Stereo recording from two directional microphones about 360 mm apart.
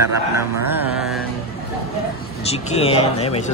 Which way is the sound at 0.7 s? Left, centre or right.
Centre.